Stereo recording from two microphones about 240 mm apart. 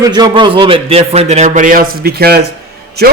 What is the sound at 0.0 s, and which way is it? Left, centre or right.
A man's voice, centre.